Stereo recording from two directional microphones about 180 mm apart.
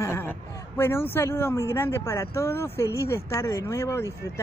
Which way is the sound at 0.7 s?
10° left (ahead or behind).